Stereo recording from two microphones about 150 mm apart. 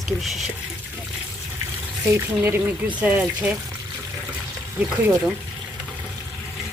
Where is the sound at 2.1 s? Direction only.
15° right (ahead or behind).